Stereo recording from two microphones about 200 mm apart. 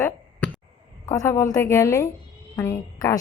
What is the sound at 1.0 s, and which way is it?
Speech, 15° left (ahead or behind).